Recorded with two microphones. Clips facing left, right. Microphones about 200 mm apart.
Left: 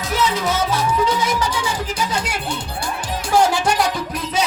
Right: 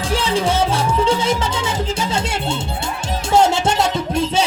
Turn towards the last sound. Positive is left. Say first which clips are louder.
# right 4 dB
turn(degrees=-25)  # may be behind; listen again after turning